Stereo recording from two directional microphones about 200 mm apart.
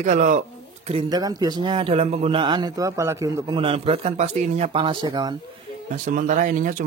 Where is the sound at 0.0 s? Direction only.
40° right (ahead or behind).